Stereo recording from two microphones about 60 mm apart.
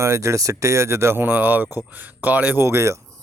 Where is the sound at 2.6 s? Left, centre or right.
Right.